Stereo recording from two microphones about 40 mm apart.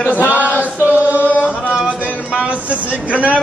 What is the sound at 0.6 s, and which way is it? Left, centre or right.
Chant, right.